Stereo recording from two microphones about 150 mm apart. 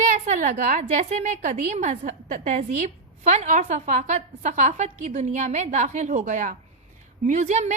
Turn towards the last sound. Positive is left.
turn(degrees=-50)  # may be behind; listen again after turning